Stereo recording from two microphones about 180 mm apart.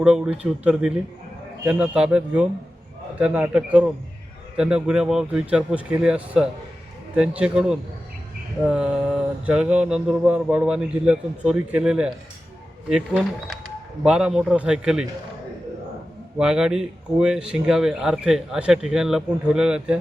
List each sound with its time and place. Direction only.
0.0 s speech: 5° right (ahead or behind)
16.4 s speech: 5° right (ahead or behind)